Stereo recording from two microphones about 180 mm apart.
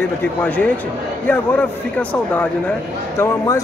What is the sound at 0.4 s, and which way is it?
Speech, 10° left (ahead or behind).